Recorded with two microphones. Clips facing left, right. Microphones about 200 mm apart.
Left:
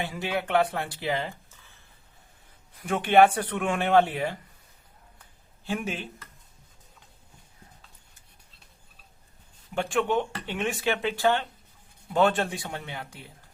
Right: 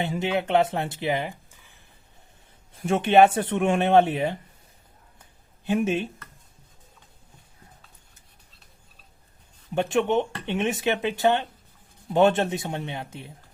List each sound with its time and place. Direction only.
0.0 s speech: 25° right (ahead or behind)
2.7 s speech: 25° right (ahead or behind)
5.6 s speech: 25° right (ahead or behind)
9.7 s speech: 20° right (ahead or behind)